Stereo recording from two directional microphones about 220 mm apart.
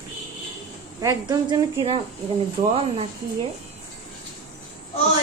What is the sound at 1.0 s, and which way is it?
A woman's voice, 15° right (ahead or behind).